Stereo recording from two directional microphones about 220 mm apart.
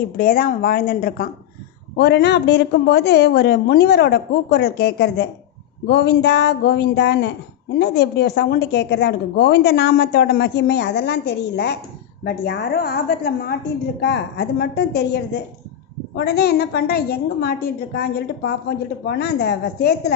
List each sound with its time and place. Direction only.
0.2 s a woman's voice: 40° left (ahead or behind)